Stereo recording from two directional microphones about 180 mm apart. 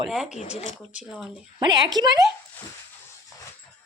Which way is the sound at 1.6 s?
20° right (ahead or behind).